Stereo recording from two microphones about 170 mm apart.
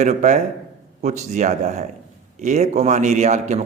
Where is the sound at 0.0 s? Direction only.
45° right (ahead or behind).